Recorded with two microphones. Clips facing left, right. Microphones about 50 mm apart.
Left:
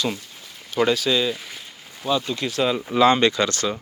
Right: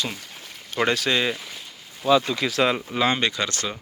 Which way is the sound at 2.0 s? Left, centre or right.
Right.